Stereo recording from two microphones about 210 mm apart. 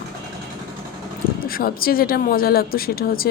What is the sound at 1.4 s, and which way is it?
A woman's voice, 45° left (ahead or behind).